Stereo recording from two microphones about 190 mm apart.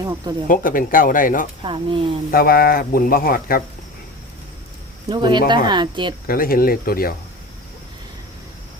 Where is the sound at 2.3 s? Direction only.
50° left (ahead or behind).